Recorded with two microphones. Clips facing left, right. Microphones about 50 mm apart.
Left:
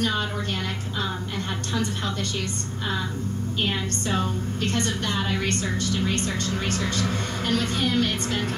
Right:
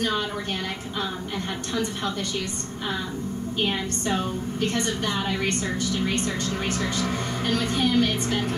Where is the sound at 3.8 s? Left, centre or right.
Centre.